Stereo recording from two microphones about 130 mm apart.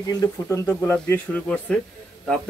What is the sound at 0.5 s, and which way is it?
Speech, 15° left (ahead or behind).